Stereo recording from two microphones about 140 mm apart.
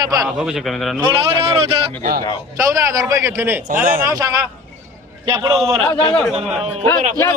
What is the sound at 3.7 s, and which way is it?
Speech, 75° right (ahead or behind).